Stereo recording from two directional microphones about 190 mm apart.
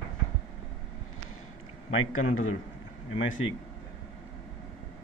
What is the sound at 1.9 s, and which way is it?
Speech, 90° left.